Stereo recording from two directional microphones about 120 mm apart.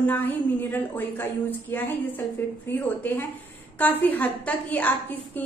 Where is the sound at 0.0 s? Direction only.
15° left (ahead or behind).